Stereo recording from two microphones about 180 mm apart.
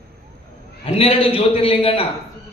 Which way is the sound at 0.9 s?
30° left (ahead or behind).